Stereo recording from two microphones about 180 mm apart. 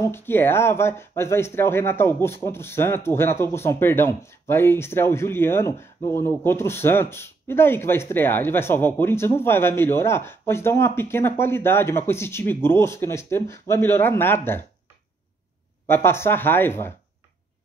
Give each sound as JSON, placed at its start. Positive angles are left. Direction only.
{"t": 0.0, "sound": "speech", "side_deg": 10}
{"t": 15.9, "sound": "speech", "side_deg": 15}